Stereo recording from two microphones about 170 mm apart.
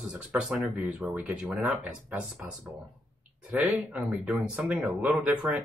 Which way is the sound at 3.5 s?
5° right (ahead or behind).